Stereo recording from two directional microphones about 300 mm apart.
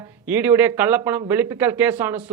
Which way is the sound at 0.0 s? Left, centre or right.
Centre.